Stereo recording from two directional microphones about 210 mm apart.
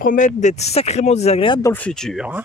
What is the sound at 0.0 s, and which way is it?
Speech, 40° left (ahead or behind).